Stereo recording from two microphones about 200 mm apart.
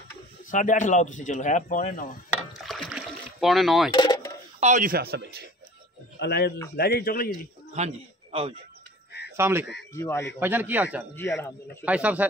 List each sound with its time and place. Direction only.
0.5 s speech: 40° left (ahead or behind)
2.6 s rowboat: centre (ahead or behind)
3.9 s speech: 20° left (ahead or behind)
4.6 s speech: 40° right (ahead or behind); by 5.5 s 55° right (ahead or behind)
6.1 s speech: 55° left (ahead or behind)
7.7 s a man's voice: 30° right (ahead or behind)
9.4 s speech: 10° right (ahead or behind)
9.9 s speech: 10° left (ahead or behind)
10.4 s speech: 10° right (ahead or behind)
11.1 s speech: 15° left (ahead or behind)
11.8 s speech: 5° right (ahead or behind)